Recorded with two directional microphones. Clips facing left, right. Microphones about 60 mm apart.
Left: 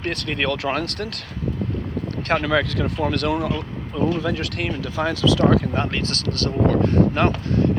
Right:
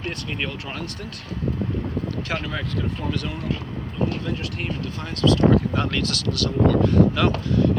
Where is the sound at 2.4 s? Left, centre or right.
Left.